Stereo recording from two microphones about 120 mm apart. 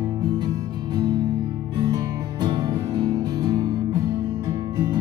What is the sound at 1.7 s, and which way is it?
Music, 35° right (ahead or behind).